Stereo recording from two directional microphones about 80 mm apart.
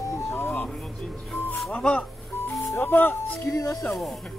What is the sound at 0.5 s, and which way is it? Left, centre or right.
Speech, centre.